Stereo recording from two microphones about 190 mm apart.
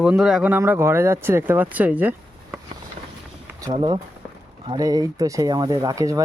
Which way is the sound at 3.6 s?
25° right (ahead or behind).